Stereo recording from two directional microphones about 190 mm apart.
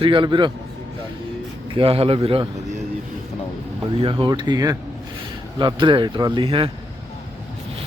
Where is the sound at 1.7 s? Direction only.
30° right (ahead or behind).